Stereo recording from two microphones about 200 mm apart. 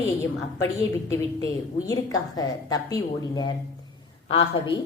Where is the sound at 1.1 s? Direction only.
15° left (ahead or behind).